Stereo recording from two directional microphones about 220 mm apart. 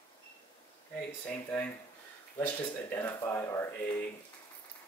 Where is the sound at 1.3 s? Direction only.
5° left (ahead or behind).